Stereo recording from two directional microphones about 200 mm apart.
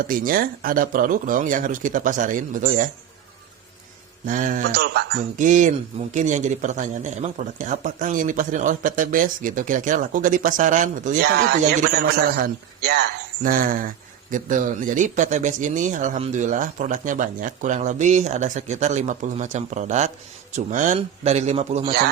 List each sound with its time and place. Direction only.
0.0 s speech: 45° right (ahead or behind)
4.3 s speech: 40° right (ahead or behind)